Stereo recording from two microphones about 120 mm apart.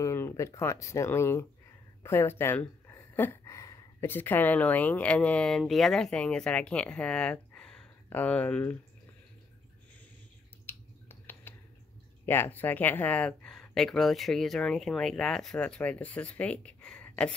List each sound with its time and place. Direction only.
0.0 s speech: 25° left (ahead or behind)
2.0 s a sound: 20° left (ahead or behind)
4.1 s speech: 15° left (ahead or behind)
10.7 s finger snapping: 20° left (ahead or behind)
12.3 s speech: 15° left (ahead or behind)